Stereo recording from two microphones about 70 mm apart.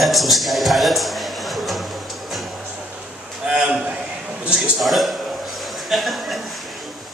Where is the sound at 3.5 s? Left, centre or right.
Centre.